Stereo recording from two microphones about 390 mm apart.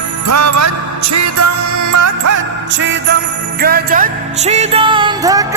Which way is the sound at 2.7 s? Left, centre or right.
Right.